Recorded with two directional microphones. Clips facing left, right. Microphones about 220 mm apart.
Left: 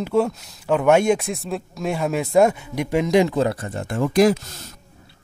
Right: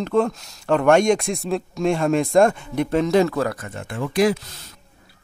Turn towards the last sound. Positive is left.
turn(degrees=40)  # may be behind; listen again after turning